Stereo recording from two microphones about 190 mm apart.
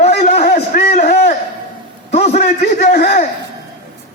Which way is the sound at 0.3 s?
40° left (ahead or behind).